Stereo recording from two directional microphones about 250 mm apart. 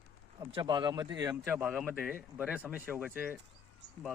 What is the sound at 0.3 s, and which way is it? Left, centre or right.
Speech, centre.